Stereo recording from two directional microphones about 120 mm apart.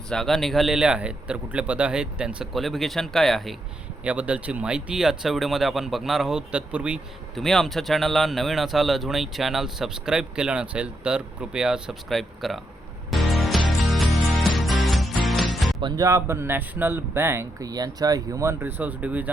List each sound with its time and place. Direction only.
0.1 s speech: 5° left (ahead or behind)
4.0 s speech: 10° right (ahead or behind)
7.3 s speech: 5° left (ahead or behind)
13.1 s music: centre (ahead or behind)
15.8 s speech: 30° right (ahead or behind)
17.7 s speech: 30° right (ahead or behind)
18.6 s speech: 15° right (ahead or behind)